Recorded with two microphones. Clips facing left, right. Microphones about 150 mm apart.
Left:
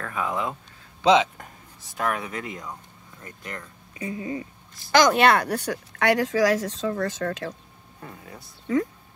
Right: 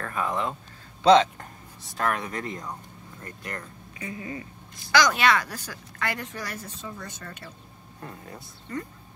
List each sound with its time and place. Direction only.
0.0 s speech: 5° left (ahead or behind)
4.0 s speech: 25° left (ahead or behind)
4.9 s speech: 50° left (ahead or behind); by 7.5 s 90° left
8.0 s speech: centre (ahead or behind)
8.7 s speech: 90° left